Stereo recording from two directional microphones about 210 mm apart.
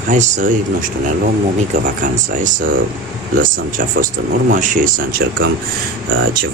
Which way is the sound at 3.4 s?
40° right (ahead or behind).